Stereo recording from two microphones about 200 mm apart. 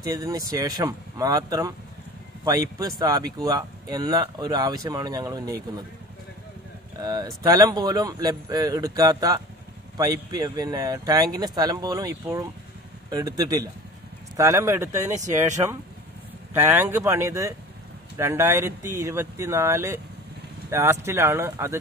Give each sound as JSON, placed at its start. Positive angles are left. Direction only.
{"t": 0.0, "sound": "speech", "side_deg": -15}
{"t": 7.0, "sound": "speech", "side_deg": -20}